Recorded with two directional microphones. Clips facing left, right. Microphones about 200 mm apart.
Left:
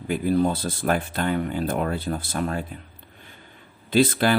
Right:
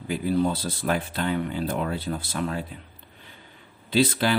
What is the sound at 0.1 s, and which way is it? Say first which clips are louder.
Speech: left 2 dB; 50° left (ahead or behind).